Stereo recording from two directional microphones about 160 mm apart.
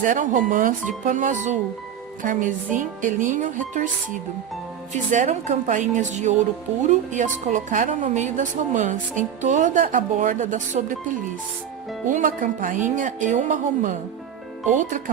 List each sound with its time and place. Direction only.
0.0 s a woman's voice: 55° right (ahead or behind)
12.0 s a woman's voice: 55° right (ahead or behind)